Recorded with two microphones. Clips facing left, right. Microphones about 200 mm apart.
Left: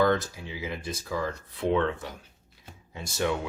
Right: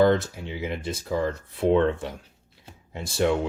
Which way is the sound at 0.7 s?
25° right (ahead or behind).